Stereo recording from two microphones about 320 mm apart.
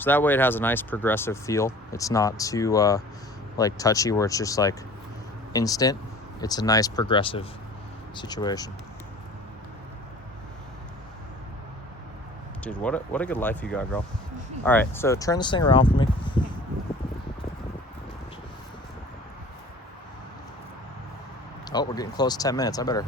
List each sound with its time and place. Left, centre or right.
0.0 s speech: centre
12.6 s speech: centre
21.6 s speech: centre